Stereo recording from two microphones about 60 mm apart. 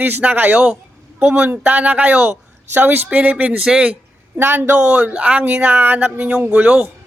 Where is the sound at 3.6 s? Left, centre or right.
Centre.